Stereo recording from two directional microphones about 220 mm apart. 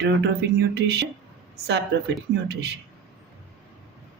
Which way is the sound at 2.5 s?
50° right (ahead or behind).